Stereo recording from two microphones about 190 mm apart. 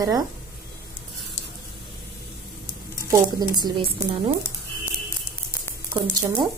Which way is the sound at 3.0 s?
15° right (ahead or behind).